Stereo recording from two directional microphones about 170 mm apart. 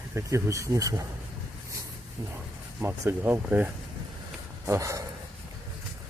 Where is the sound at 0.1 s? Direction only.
15° right (ahead or behind).